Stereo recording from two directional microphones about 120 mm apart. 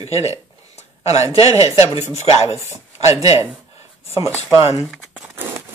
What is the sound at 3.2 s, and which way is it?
Speech, 30° right (ahead or behind).